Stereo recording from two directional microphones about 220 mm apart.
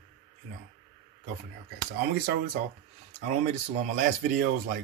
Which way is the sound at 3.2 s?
35° right (ahead or behind).